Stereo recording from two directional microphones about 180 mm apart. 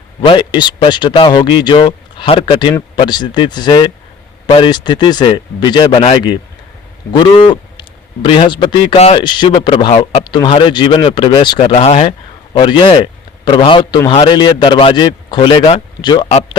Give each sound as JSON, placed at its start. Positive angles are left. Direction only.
{"t": 0.3, "sound": "a man's voice", "side_deg": 25}